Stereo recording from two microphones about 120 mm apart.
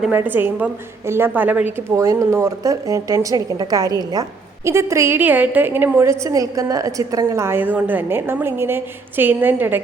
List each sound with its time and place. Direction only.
0.1 s a woman's voice: 15° right (ahead or behind)